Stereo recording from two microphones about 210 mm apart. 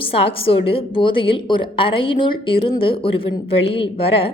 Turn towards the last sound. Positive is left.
turn(degrees=25)  # may be behind; listen again after turning